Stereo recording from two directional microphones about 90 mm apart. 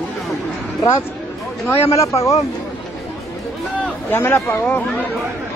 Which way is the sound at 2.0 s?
35° left (ahead or behind).